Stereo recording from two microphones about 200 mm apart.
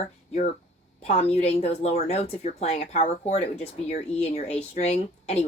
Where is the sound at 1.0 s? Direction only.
30° left (ahead or behind).